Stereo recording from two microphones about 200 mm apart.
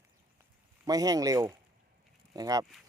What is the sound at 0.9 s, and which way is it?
Speech, 20° right (ahead or behind).